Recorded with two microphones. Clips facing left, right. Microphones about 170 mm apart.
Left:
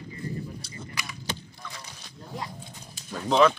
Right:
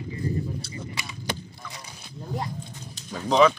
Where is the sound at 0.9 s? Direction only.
25° right (ahead or behind).